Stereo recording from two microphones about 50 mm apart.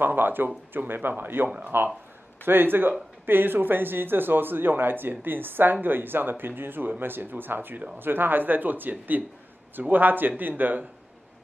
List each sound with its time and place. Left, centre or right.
0.0 s speech: right